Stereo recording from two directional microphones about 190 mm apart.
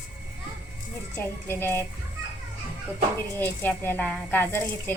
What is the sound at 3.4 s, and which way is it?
A woman's voice, 10° left (ahead or behind).